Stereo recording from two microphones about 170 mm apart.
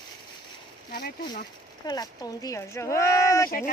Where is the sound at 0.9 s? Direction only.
60° left (ahead or behind).